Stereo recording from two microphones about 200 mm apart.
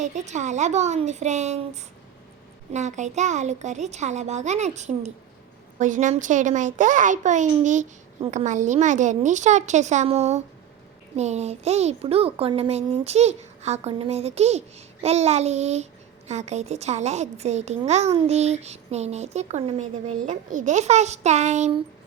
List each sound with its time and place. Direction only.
0.0 s a child's voice: 35° right (ahead or behind)